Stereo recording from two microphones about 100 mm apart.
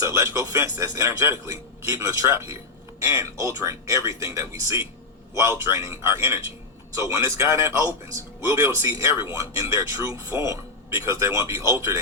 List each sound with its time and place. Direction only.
0.0 s a man's voice: 30° right (ahead or behind)